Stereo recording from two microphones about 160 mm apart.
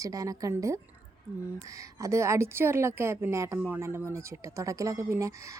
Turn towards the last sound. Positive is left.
turn(degrees=-20)  # may be behind; listen again after turning